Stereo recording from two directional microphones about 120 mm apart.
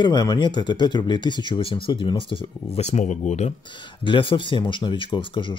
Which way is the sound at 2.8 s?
80° left.